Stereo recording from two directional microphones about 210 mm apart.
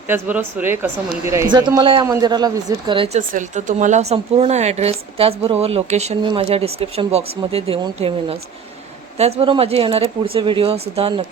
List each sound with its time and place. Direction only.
0.1 s speech: 10° right (ahead or behind); by 3.2 s 25° right (ahead or behind)
3.2 s speech: 35° right (ahead or behind)